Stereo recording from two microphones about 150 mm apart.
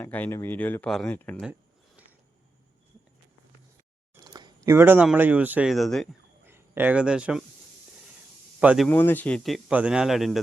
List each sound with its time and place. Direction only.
0.0 s speech: 10° left (ahead or behind)
4.2 s a sound: 30° right (ahead or behind)
4.7 s a man's voice: 15° right (ahead or behind); by 6.1 s centre (ahead or behind)
6.4 s speech: 15° right (ahead or behind)
8.6 s a man's voice: 5° right (ahead or behind)
8.9 s a man's voice: 10° left (ahead or behind)